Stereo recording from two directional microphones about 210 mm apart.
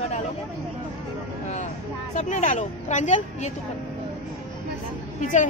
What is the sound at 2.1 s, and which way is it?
A woman's voice, 35° left (ahead or behind).